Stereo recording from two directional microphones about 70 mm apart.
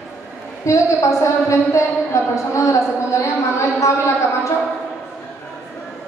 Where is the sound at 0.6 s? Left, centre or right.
Left.